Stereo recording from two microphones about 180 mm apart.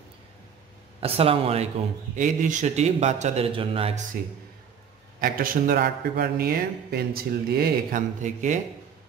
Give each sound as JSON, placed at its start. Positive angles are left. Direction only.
{"t": 1.0, "sound": "a man's voice", "side_deg": -30}
{"t": 2.1, "sound": "a man's voice", "side_deg": -45}
{"t": 5.2, "sound": "a man's voice", "side_deg": -50}
{"t": 8.2, "sound": "speech", "side_deg": -45}